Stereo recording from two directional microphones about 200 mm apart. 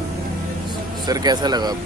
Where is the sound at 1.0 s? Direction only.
20° right (ahead or behind).